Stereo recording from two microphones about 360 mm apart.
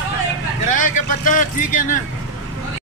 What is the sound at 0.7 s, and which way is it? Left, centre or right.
A man's voice, left.